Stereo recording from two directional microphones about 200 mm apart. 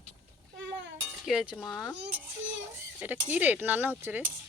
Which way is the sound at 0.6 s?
65° right (ahead or behind).